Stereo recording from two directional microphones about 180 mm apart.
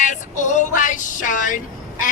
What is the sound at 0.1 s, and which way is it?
Music, 45° left (ahead or behind).